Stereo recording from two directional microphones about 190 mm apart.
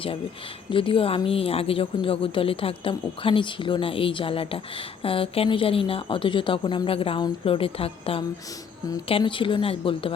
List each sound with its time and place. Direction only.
0.7 s a woman's voice: 30° left (ahead or behind)